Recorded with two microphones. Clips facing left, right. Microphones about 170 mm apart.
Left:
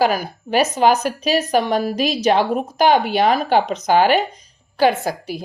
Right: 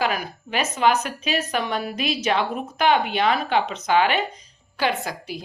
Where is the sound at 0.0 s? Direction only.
40° left (ahead or behind).